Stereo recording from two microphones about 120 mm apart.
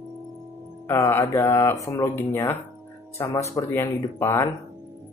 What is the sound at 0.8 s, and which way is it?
Speech, 20° left (ahead or behind).